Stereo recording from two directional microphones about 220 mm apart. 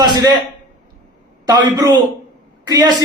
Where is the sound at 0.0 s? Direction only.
20° right (ahead or behind).